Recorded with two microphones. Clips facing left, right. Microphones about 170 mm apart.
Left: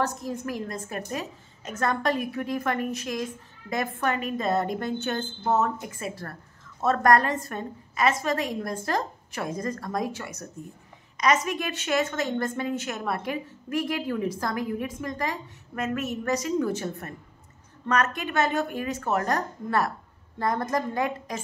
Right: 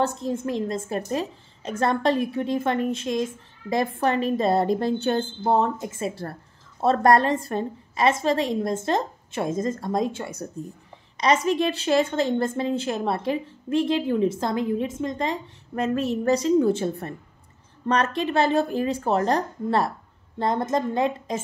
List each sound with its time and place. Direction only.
0.0 s a woman's voice: 25° right (ahead or behind)